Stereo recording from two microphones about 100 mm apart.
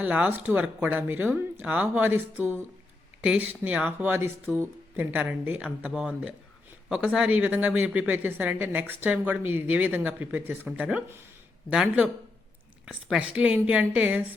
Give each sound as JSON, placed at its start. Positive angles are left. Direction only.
{"t": 0.0, "sound": "speech", "side_deg": -15}